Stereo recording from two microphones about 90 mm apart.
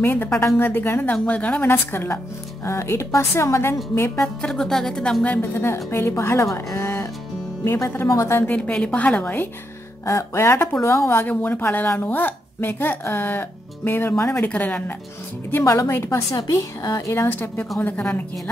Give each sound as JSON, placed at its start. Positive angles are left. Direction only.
{"t": 0.0, "sound": "speech", "side_deg": 25}
{"t": 4.4, "sound": "speech", "side_deg": 5}
{"t": 5.4, "sound": "speech", "side_deg": 25}
{"t": 8.5, "sound": "a woman's voice", "side_deg": 15}
{"t": 10.0, "sound": "speech", "side_deg": 30}
{"t": 14.4, "sound": "a woman's voice", "side_deg": 15}
{"t": 15.5, "sound": "speech", "side_deg": 35}
{"t": 17.1, "sound": "speech", "side_deg": 25}